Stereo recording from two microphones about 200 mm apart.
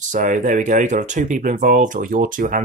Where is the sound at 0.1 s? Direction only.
40° right (ahead or behind).